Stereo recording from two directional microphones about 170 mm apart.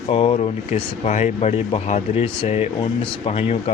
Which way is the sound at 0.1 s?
35° left (ahead or behind).